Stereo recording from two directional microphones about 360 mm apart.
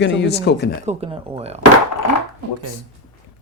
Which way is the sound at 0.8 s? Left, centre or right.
Centre.